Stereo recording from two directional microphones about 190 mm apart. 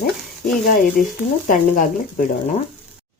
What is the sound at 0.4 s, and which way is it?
Speech, 45° left (ahead or behind).